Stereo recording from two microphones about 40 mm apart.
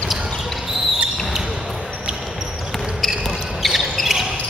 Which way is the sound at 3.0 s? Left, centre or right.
Centre.